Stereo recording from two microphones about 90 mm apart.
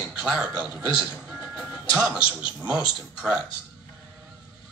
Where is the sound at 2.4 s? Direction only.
10° right (ahead or behind).